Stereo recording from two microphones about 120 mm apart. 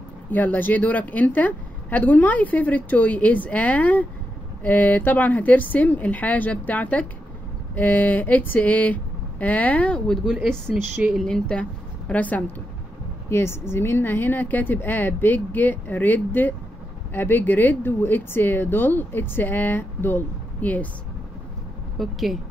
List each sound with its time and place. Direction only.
0.3 s speech: 15° left (ahead or behind)
10.2 s speech: 5° right (ahead or behind); by 20.9 s 15° left (ahead or behind)
21.9 s speech: centre (ahead or behind)